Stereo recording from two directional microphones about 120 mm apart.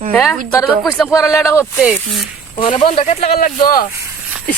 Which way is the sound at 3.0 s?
65° left (ahead or behind).